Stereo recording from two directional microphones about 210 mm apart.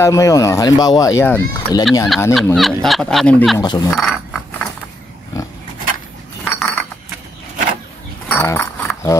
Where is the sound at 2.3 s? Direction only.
Centre (ahead or behind).